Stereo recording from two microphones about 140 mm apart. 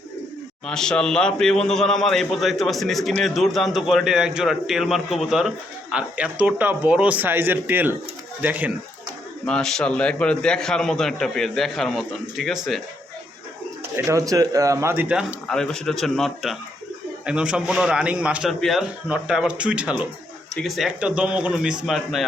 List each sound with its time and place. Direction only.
0.7 s a man's voice: 5° left (ahead or behind); by 8.7 s 10° right (ahead or behind)
9.5 s a man's voice: 5° left (ahead or behind)
13.9 s speech: 25° right (ahead or behind)
15.1 s a man's voice: centre (ahead or behind)